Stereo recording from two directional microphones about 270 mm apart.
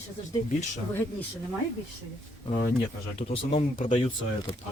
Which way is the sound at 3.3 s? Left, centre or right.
Left.